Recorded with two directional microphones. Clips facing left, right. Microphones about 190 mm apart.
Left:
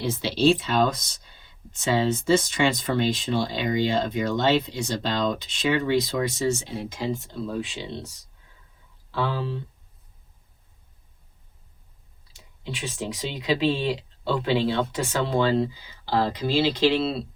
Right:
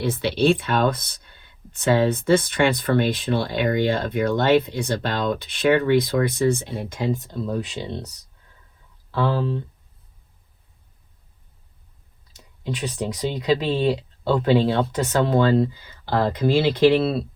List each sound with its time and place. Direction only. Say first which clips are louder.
0.0 s speech: right 1 dB; 60° right (ahead or behind)
9.1 s speech: right 5 dB; 45° right (ahead or behind)
12.3 s speech: right 6 dB; 45° right (ahead or behind)